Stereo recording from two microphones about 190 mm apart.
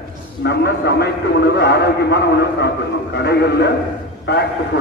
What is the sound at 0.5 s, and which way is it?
A man's voice, 60° left (ahead or behind).